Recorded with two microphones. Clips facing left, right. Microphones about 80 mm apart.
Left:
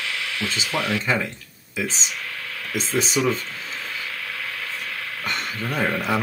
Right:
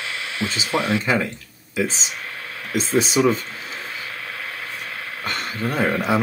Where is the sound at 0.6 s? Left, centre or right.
Right.